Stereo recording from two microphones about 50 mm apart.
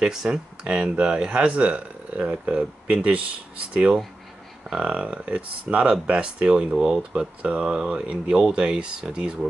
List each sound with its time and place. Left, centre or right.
0.0 s speech: centre